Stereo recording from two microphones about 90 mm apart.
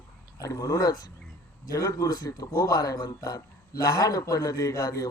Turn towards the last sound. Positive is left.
turn(degrees=40)  # may be behind; listen again after turning